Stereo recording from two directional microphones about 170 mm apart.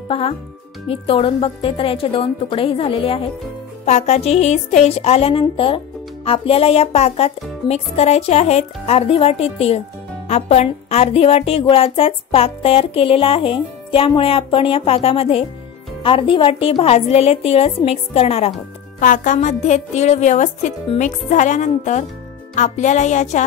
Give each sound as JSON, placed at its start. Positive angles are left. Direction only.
{"t": 0.8, "sound": "a woman's voice", "side_deg": 35}
{"t": 18.9, "sound": "a woman's voice", "side_deg": 50}